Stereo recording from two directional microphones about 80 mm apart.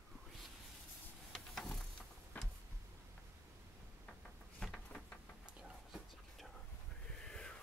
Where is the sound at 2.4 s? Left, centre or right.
Centre.